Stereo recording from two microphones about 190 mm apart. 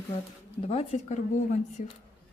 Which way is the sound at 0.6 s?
30° left (ahead or behind).